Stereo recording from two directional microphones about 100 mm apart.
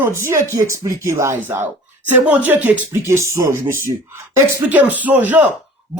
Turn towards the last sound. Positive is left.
turn(degrees=-15)  # may be behind; listen again after turning